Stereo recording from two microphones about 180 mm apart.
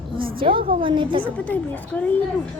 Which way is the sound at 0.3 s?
30° right (ahead or behind).